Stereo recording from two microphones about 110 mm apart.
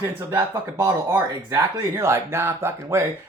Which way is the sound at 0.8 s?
25° right (ahead or behind).